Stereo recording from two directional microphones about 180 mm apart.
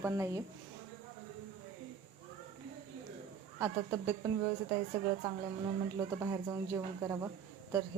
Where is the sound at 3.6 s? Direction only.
15° right (ahead or behind).